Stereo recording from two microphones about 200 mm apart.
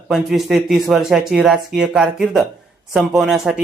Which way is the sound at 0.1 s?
Centre (ahead or behind).